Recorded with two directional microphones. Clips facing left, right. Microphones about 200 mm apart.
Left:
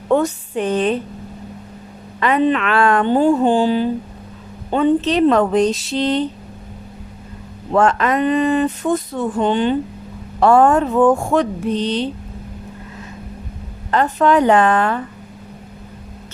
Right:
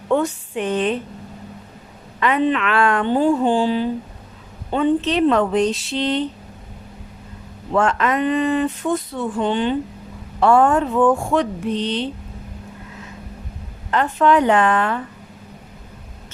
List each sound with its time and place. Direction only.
0.1 s speech: 40° left (ahead or behind)
2.2 s speech: 40° left (ahead or behind)
7.7 s speech: 40° left (ahead or behind)
13.9 s speech: 40° left (ahead or behind)